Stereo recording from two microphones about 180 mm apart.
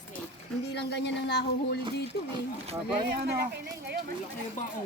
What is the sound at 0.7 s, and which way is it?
Speech, 70° left (ahead or behind).